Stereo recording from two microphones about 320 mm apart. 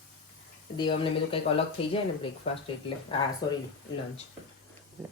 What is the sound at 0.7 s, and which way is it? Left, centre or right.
Speech, centre.